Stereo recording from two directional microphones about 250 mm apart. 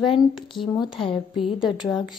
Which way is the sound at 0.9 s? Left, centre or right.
Left.